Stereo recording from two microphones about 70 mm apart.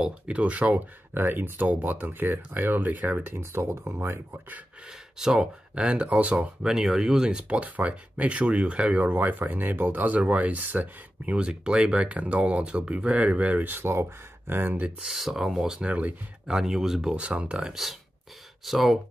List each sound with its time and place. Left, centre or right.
0.0 s speech: centre; by 4.4 s right
5.2 s speech: centre; by 14.9 s right
15.0 s speech: centre
15.9 s speech: centre
16.5 s speech: centre
18.7 s speech: centre